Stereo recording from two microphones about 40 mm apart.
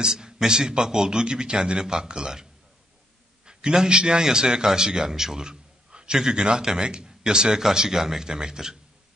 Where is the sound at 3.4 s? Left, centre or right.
Centre.